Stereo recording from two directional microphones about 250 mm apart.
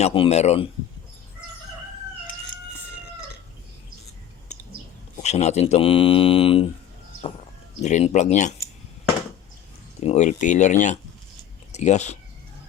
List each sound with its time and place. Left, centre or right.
0.0 s speech: left
5.1 s speech: left
7.8 s speech: left
10.0 s speech: left